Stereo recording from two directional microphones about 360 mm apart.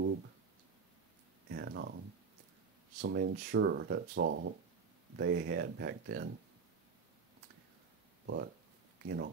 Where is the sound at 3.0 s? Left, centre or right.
Right.